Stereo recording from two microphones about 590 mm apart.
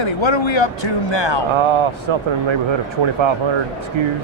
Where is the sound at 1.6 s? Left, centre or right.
Right.